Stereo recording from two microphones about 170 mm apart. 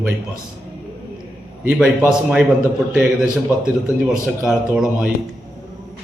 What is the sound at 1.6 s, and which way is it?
Speech, 10° right (ahead or behind).